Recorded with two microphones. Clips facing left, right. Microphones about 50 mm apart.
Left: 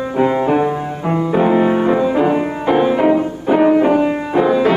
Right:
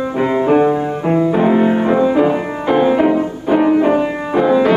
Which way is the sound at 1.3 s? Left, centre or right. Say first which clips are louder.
Left 4 dB; centre.